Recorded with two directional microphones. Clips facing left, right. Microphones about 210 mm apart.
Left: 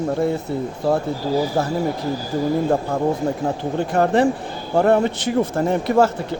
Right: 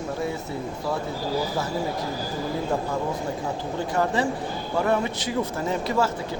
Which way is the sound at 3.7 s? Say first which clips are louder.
Left 7 dB; 60° left (ahead or behind).